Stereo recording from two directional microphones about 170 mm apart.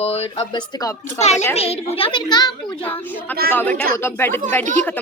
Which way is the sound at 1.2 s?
40° left (ahead or behind).